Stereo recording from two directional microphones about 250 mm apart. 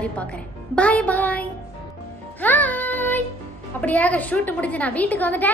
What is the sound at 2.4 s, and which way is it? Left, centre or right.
Music, centre.